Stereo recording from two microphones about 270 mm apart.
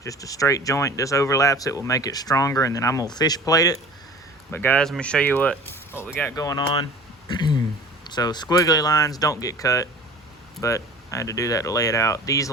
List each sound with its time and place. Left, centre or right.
0.0 s speech: centre